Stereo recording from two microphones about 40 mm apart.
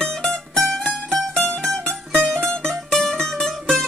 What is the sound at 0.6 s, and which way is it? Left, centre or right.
Music, centre.